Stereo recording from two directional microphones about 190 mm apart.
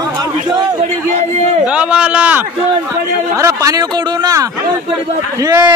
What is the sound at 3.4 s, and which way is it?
A man's voice, 15° right (ahead or behind).